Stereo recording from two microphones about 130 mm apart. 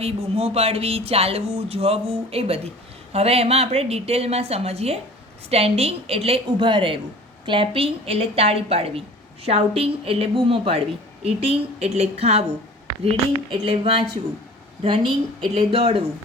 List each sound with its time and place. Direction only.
0.0 s a woman's voice: 50° right (ahead or behind)